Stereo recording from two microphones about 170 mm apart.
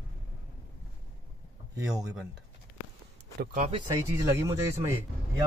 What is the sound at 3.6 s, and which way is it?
Speech, 35° right (ahead or behind).